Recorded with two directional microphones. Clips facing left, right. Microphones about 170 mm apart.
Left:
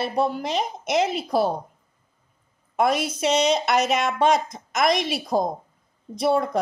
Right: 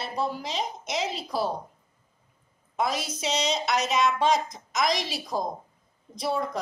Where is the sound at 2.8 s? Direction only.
60° left (ahead or behind).